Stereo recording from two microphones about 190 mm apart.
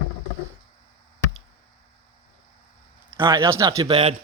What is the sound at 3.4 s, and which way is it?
Speech, 15° right (ahead or behind).